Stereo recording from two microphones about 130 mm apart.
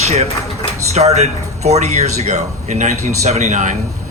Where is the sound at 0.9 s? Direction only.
55° right (ahead or behind).